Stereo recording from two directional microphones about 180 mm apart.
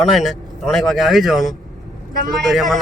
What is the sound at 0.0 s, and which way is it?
A man's voice, centre (ahead or behind).